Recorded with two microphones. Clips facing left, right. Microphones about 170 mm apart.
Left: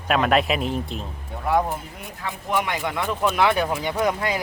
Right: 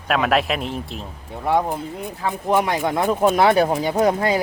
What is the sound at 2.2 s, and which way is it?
Speech, 35° right (ahead or behind).